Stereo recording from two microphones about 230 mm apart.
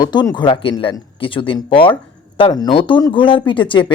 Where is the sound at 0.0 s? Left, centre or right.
Centre.